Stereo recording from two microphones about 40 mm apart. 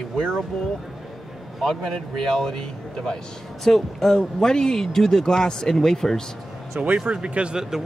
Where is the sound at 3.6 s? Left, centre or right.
Centre.